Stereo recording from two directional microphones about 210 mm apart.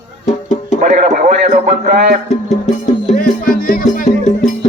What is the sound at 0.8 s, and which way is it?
Radio, 40° right (ahead or behind).